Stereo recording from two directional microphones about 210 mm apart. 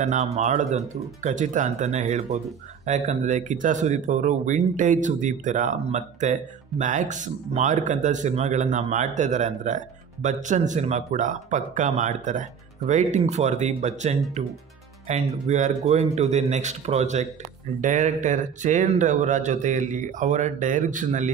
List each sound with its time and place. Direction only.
0.0 s speech: 30° right (ahead or behind)